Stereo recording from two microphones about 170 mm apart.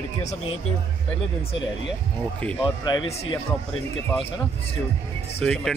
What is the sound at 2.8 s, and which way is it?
Speech, 25° left (ahead or behind).